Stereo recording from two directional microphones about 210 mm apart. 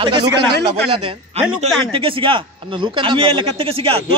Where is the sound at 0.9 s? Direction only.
25° right (ahead or behind).